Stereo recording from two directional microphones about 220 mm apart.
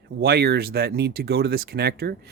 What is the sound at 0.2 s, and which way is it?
Speech, 45° right (ahead or behind).